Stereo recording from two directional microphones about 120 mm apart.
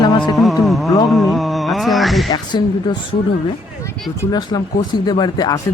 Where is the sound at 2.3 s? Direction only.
35° left (ahead or behind).